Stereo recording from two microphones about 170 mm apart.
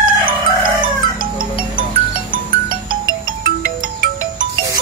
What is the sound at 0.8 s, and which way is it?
Chicken, 55° right (ahead or behind).